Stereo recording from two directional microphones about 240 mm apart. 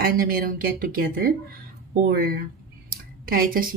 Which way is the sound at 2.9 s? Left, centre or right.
Right.